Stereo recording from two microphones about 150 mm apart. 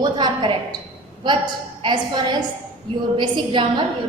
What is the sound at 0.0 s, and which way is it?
A woman's voice, 30° right (ahead or behind).